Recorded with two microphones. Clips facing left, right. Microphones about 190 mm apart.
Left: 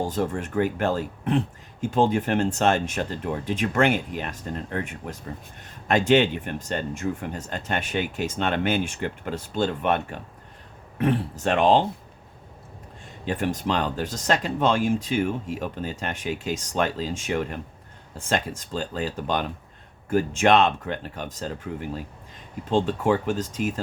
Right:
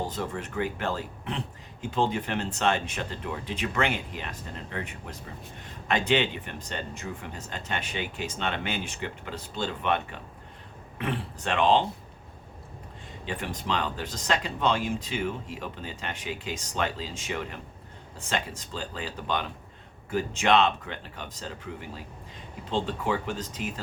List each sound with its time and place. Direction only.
0.0 s speech: 50° left (ahead or behind)
13.2 s speech: 45° left (ahead or behind)